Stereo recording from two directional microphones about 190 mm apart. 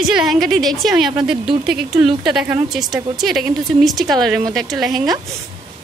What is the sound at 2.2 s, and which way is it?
A woman's voice, 5° right (ahead or behind).